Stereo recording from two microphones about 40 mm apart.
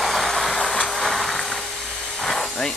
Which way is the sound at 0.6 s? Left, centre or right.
Centre.